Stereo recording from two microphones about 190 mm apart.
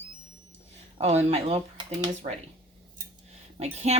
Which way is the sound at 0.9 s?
35° right (ahead or behind).